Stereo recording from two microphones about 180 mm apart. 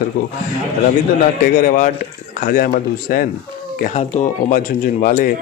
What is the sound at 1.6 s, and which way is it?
Speech, 50° left (ahead or behind).